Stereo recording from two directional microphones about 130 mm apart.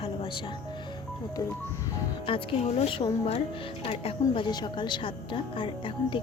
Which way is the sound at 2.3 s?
45° left (ahead or behind).